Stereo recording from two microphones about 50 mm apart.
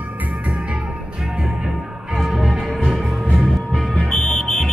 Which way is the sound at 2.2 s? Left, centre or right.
Centre.